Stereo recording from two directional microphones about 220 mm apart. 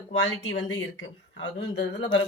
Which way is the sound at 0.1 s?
55° left (ahead or behind).